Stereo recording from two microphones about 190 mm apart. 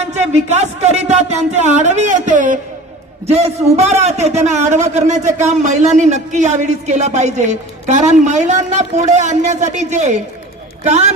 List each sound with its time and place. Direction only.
0.0 s a man's voice: 35° right (ahead or behind)